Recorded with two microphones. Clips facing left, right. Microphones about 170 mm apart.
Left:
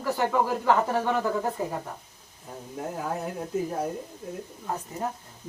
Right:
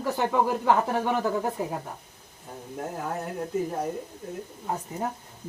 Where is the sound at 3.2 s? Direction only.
Centre (ahead or behind).